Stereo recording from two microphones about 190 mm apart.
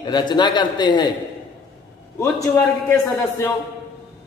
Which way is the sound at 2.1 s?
15° left (ahead or behind).